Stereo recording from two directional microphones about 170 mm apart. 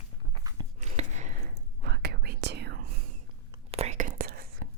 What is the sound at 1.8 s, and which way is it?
Whispering, 70° right (ahead or behind).